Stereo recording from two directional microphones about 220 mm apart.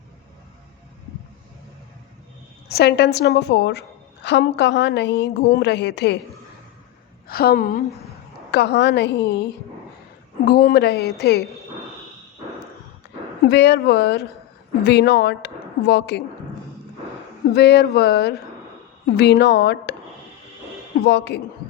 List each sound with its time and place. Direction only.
2.6 s a woman's voice: 45° left (ahead or behind)
7.3 s a woman's voice: 45° left (ahead or behind)
10.4 s a woman's voice: 45° left (ahead or behind)
13.5 s a woman's voice: 50° left (ahead or behind)
17.5 s a woman's voice: 50° left (ahead or behind)
21.0 s a woman's voice: 50° left (ahead or behind)